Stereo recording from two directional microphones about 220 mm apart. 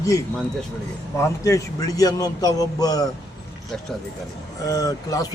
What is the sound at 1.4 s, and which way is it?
Speech, 15° left (ahead or behind).